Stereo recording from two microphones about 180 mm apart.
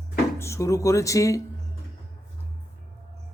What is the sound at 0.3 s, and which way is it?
Speech, 15° left (ahead or behind).